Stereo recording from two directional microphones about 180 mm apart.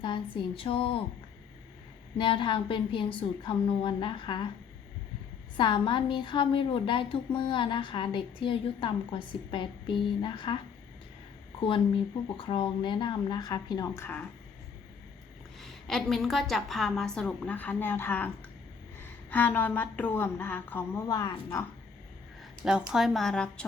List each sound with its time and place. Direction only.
0.0 s a woman's voice: 25° left (ahead or behind)
2.1 s a woman's voice: 25° left (ahead or behind)
5.5 s a woman's voice: 25° left (ahead or behind)
12.4 s a woman's voice: 30° left (ahead or behind); by 14.3 s 10° left (ahead or behind)
15.6 s a woman's voice: centre (ahead or behind); by 21.7 s 15° left (ahead or behind)
22.6 s a woman's voice: 5° right (ahead or behind)